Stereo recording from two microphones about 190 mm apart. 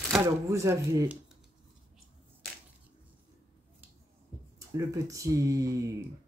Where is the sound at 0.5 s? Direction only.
15° right (ahead or behind).